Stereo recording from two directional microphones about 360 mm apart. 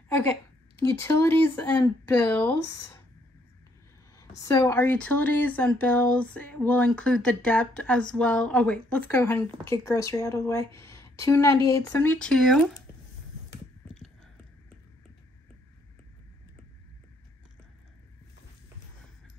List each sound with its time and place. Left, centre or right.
0.1 s a woman's voice: centre
4.2 s speech: centre